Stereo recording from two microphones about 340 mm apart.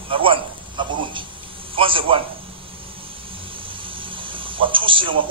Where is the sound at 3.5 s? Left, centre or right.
Centre.